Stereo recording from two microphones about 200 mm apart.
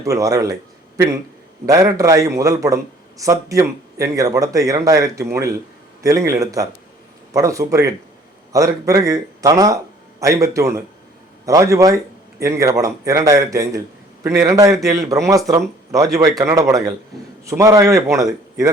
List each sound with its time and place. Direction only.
0.0 s a man's voice: 15° right (ahead or behind)